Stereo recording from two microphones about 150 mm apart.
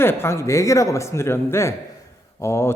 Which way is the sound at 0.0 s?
15° left (ahead or behind).